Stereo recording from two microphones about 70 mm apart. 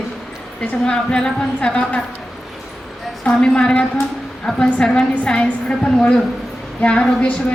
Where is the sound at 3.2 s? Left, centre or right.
Centre.